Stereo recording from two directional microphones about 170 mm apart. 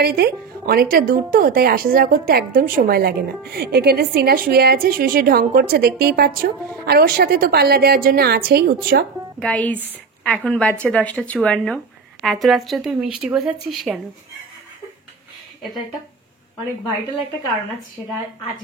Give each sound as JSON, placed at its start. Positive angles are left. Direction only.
{"t": 0.0, "sound": "a woman's voice", "side_deg": -65}
{"t": 9.4, "sound": "a woman's voice", "side_deg": 5}